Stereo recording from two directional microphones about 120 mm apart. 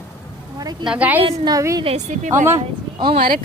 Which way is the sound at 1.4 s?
30° right (ahead or behind).